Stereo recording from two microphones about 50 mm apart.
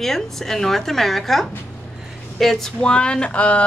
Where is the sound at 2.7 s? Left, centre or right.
Centre.